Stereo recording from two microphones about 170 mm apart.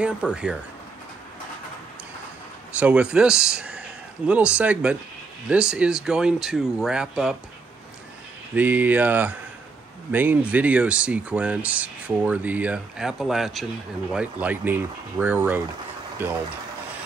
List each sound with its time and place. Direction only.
0.0 s speech: 5° right (ahead or behind)
2.8 s speech: 5° right (ahead or behind)
8.5 s speech: 10° right (ahead or behind)